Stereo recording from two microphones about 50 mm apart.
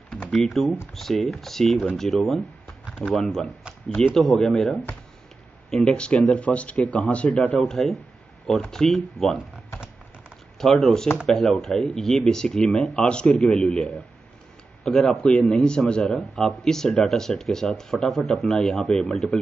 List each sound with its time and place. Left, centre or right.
0.3 s speech: centre; by 7.2 s left
7.5 s speech: centre
10.6 s speech: centre